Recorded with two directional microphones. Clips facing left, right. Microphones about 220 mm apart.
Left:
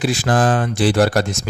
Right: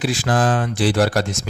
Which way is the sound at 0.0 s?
50° left (ahead or behind).